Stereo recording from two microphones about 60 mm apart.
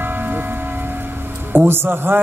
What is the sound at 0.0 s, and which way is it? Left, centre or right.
Music, right.